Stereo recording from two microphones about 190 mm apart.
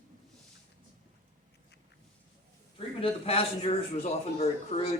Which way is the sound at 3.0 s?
30° left (ahead or behind).